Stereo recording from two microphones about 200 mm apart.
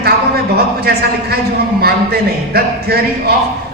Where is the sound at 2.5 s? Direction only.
50° right (ahead or behind).